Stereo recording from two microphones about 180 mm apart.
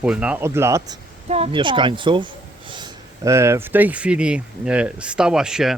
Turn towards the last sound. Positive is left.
turn(degrees=0)  # may be behind; listen again after turning